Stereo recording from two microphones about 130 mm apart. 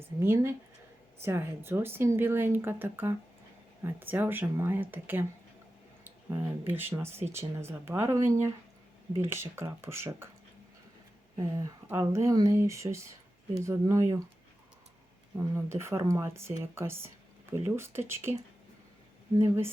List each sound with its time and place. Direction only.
0.0 s speech: 20° right (ahead or behind)
11.3 s speech: 25° right (ahead or behind)
15.5 s speech: 20° right (ahead or behind)
19.4 s speech: 20° right (ahead or behind)